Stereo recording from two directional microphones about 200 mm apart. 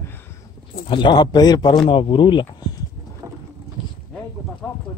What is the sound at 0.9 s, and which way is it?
A man's voice, 25° left (ahead or behind).